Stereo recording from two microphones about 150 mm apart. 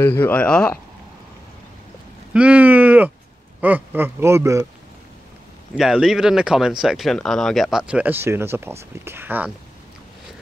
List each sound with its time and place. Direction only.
0.0 s speech: 10° left (ahead or behind)
2.3 s speech: 10° right (ahead or behind)
5.8 s speech: 5° right (ahead or behind)